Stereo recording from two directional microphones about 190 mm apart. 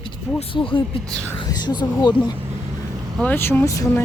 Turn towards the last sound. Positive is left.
turn(degrees=15)  # may be behind; listen again after turning